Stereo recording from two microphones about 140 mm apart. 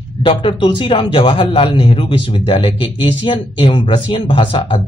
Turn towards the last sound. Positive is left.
turn(degrees=40)  # may be behind; listen again after turning